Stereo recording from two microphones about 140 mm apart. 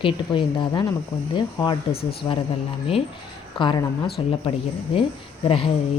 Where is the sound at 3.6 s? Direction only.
35° left (ahead or behind).